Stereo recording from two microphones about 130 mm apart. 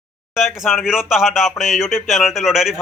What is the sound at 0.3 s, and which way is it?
A man's voice, centre (ahead or behind).